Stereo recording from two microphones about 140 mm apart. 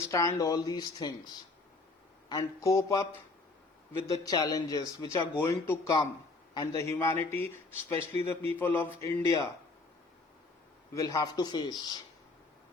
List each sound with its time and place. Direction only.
0.1 s speech: 25° left (ahead or behind)
4.2 s a man's voice: 25° left (ahead or behind)
10.9 s speech: 25° left (ahead or behind)